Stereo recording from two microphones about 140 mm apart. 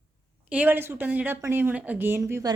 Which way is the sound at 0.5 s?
10° right (ahead or behind).